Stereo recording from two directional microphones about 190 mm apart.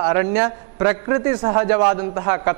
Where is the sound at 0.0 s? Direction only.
15° right (ahead or behind).